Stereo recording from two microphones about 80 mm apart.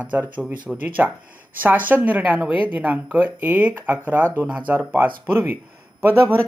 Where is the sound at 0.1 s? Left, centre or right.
Centre.